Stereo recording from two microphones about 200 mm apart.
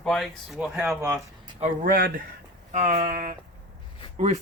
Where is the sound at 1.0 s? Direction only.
15° right (ahead or behind).